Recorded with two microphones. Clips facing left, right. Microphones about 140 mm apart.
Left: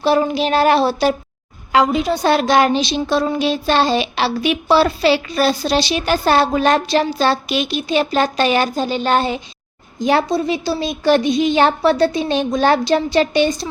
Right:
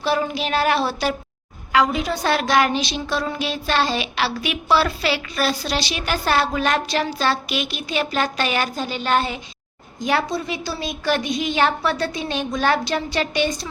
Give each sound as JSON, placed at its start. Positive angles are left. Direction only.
{"t": 0.0, "sound": "a woman's voice", "side_deg": 30}